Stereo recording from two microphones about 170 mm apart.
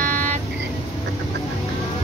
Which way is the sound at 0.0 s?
50° right (ahead or behind).